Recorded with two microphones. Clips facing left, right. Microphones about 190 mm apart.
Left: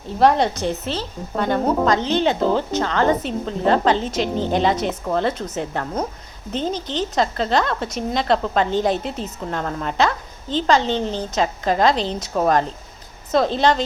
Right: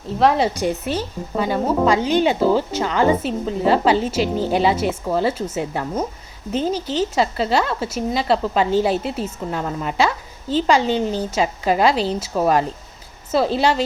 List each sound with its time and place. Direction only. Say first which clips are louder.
0.1 s a woman's voice: even; centre (ahead or behind)